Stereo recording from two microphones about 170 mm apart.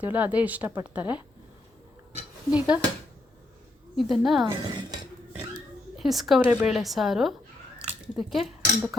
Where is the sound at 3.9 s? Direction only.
Centre (ahead or behind).